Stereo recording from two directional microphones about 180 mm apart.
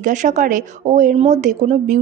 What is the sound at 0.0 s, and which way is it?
A woman's voice, 45° right (ahead or behind).